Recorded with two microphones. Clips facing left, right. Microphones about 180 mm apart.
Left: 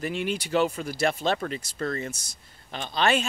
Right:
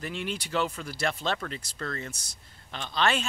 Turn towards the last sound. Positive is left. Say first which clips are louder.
# left 3 dB
turn(degrees=10)  # may be behind; listen again after turning